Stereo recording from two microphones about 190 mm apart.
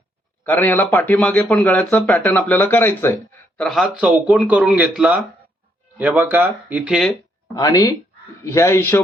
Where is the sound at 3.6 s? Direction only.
Centre (ahead or behind).